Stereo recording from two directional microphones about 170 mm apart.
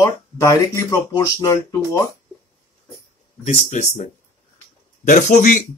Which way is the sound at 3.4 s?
40° left (ahead or behind).